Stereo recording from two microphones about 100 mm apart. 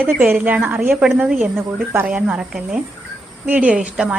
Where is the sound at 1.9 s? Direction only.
10° right (ahead or behind).